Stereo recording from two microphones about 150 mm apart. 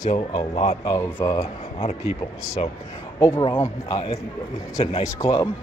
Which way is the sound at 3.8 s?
35° left (ahead or behind).